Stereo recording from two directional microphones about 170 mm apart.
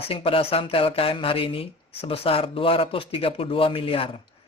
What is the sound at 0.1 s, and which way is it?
A man's voice, 30° left (ahead or behind).